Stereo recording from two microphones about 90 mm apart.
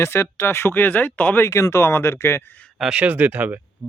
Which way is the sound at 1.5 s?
35° left (ahead or behind).